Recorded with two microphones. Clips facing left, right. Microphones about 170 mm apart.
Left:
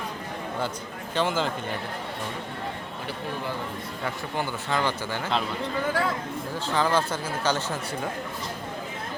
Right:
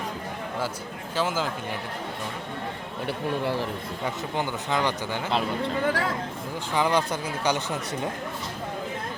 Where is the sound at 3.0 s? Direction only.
70° right (ahead or behind).